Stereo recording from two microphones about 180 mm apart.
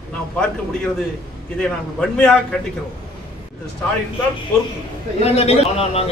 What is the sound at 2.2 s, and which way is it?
Speech, 5° left (ahead or behind).